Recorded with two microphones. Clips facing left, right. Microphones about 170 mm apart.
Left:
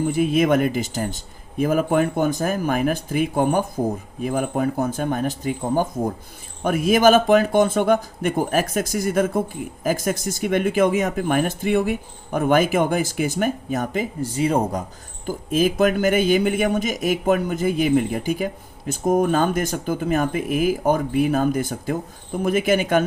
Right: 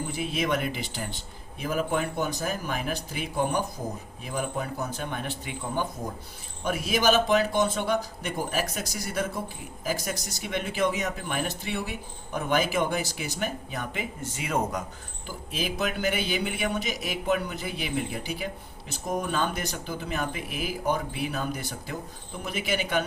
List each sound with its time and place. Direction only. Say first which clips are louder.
0.1 s a man's voice: left 10 dB; 50° left (ahead or behind); by 14.8 s 35° left (ahead or behind)
15.3 s a man's voice: left 12 dB; 45° left (ahead or behind)